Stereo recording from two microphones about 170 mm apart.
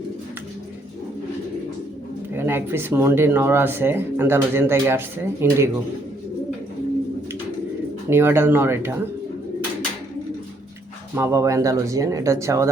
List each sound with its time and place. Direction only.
2.3 s speech: 15° right (ahead or behind)
8.1 s speech: 15° right (ahead or behind)
11.1 s speech: 15° right (ahead or behind)